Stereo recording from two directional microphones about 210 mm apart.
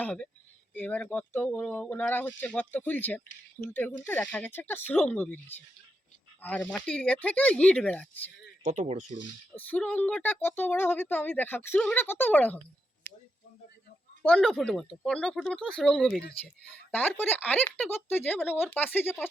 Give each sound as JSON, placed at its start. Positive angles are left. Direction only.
{"t": 0.0, "sound": "speech", "side_deg": 5}
{"t": 8.6, "sound": "speech", "side_deg": -35}
{"t": 9.6, "sound": "speech", "side_deg": 5}
{"t": 13.1, "sound": "a sound", "side_deg": 10}
{"t": 14.2, "sound": "speech", "side_deg": 5}